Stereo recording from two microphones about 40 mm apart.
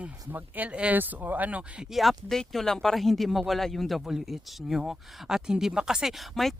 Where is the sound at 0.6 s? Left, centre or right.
Right.